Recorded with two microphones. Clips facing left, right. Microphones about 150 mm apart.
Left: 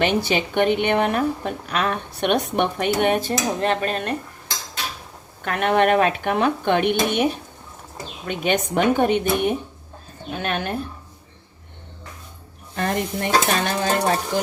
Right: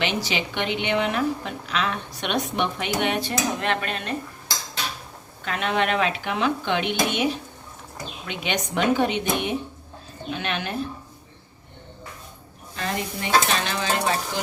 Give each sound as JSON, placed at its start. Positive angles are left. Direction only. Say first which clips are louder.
{"t": 0.0, "sound": "a woman's voice", "louder": "left 6 dB", "side_deg": 50}
{"t": 5.5, "sound": "a woman's voice", "louder": "left 6 dB", "side_deg": 55}
{"t": 12.7, "sound": "a woman's voice", "louder": "left 5 dB", "side_deg": 50}